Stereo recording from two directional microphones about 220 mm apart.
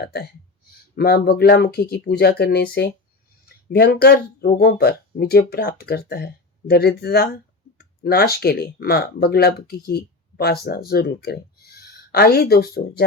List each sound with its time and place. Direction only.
0.0 s speech: 45° left (ahead or behind)